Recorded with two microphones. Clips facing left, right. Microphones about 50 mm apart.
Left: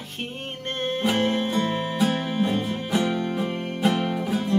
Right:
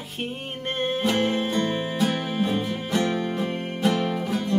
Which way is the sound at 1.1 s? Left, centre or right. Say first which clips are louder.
Left 2 dB; centre.